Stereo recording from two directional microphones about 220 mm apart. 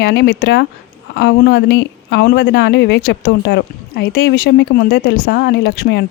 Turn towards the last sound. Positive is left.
turn(degrees=50)  # may be behind; listen again after turning